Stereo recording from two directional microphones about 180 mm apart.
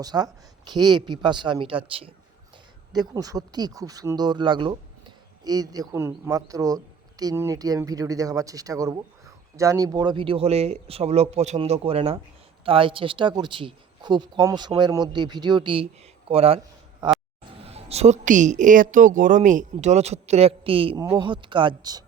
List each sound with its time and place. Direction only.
0.0 s a woman's voice: 20° right (ahead or behind)
17.6 s a woman's voice: 35° right (ahead or behind)